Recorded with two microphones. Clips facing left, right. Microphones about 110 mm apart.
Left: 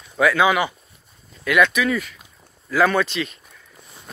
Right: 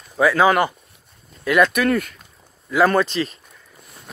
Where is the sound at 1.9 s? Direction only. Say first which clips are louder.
Right 4 dB; 50° right (ahead or behind).